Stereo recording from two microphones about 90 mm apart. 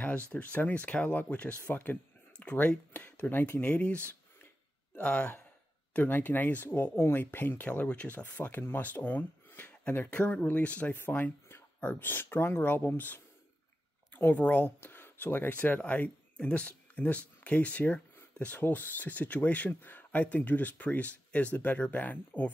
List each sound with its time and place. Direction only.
0.0 s speech: 15° left (ahead or behind)